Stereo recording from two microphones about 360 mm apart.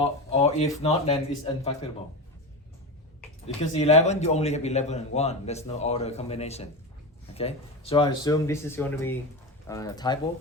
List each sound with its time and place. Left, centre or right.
0.0 s a man's voice: centre
3.4 s a man's voice: centre